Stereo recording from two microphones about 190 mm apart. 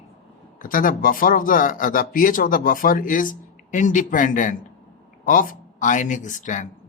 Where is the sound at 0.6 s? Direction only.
45° left (ahead or behind).